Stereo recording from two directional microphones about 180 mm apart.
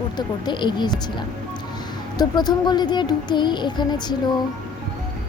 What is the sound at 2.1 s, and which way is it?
A woman's voice, 20° left (ahead or behind).